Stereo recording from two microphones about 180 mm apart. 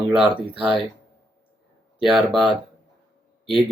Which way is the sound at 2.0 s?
Centre (ahead or behind).